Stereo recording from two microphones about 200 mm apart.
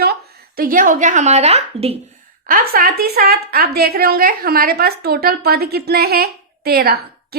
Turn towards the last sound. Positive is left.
turn(degrees=-50)  # may be behind; listen again after turning